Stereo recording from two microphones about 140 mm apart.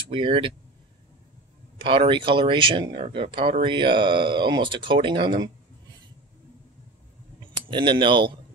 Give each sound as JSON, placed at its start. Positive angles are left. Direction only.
{"t": 0.1, "sound": "speech", "side_deg": -35}
{"t": 1.8, "sound": "speech", "side_deg": -35}
{"t": 7.5, "sound": "speech", "side_deg": -35}